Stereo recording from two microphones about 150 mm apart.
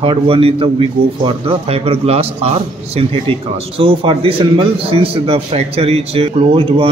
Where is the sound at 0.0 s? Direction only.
35° right (ahead or behind).